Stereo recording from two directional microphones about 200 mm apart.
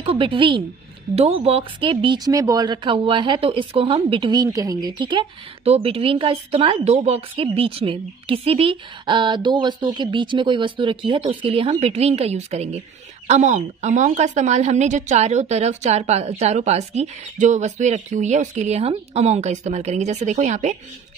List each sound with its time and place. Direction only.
0.0 s a woman's voice: 25° right (ahead or behind)